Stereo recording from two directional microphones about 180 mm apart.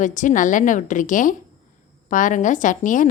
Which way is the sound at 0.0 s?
45° left (ahead or behind).